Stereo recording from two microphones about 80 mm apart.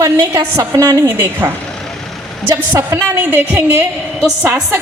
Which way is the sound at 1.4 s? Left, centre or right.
Right.